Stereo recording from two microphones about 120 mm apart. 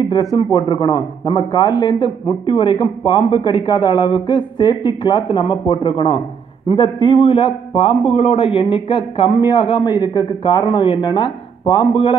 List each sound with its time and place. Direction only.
0.1 s a man's voice: 30° left (ahead or behind)